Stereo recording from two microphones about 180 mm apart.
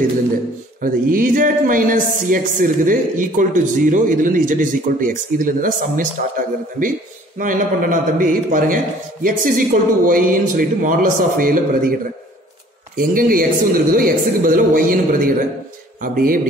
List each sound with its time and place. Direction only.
0.7 s speech: 50° right (ahead or behind)